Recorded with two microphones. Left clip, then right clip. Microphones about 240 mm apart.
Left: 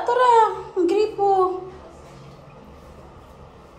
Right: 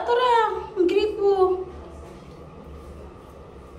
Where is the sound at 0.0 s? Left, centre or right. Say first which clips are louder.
Left 4 dB; left.